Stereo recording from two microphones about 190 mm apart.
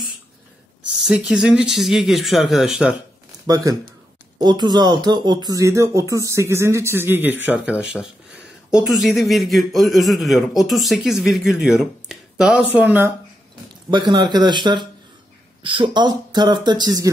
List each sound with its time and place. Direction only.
1.0 s speech: 5° right (ahead or behind)
3.4 s speech: 20° right (ahead or behind)
13.8 s speech: 25° right (ahead or behind)